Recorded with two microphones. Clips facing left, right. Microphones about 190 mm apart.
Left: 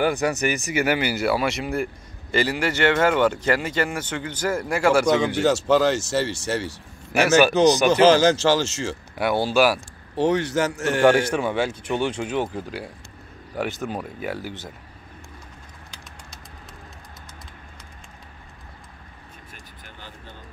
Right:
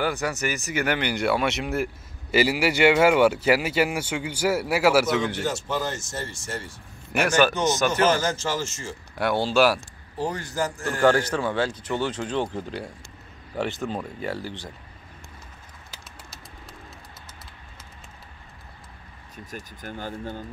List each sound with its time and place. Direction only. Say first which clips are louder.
0.0 s speech: left 5 dB; 15° left (ahead or behind); by 5.1 s 5° right (ahead or behind)
5.4 s speech: left 9 dB; 85° left
7.2 s speech: left 4 dB; 10° left (ahead or behind)
7.9 s speech: left 7 dB; 85° left
9.2 s speech: left 1 dB; 10° left (ahead or behind)
10.1 s speech: left 8 dB; 75° left (ahead or behind)
11.2 s speech: left 2 dB; 10° left (ahead or behind)
19.5 s speech: right 9 dB; 45° right (ahead or behind)